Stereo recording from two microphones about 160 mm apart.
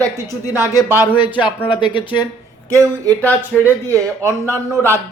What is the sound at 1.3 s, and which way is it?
Speech, 30° left (ahead or behind).